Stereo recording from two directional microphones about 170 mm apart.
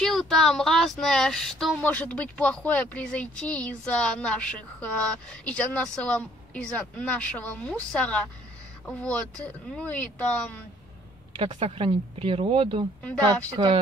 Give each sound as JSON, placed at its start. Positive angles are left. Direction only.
{"t": 0.0, "sound": "speech", "side_deg": 0}
{"t": 11.3, "sound": "speech", "side_deg": -35}